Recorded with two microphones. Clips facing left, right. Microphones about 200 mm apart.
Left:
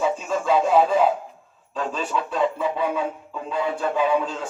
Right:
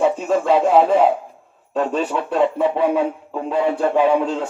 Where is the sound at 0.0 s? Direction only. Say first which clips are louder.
Right 6 dB; 60° right (ahead or behind).